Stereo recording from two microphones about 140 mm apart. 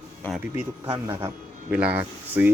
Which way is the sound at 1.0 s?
15° right (ahead or behind).